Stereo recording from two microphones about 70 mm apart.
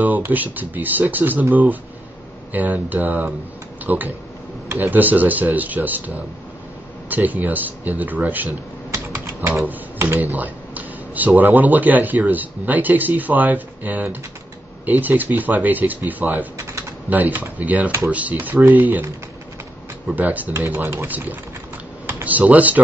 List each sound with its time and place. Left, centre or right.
0.3 s a man's voice: right
8.9 s typing: right
10.1 s a man's voice: right
20.1 s a man's voice: right
20.5 s speech: right
22.0 s computer keyboard: right